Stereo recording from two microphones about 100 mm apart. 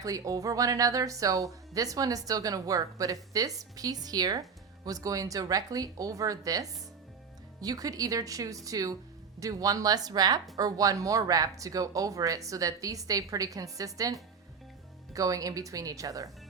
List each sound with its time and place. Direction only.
0.0 s speech: 35° right (ahead or behind)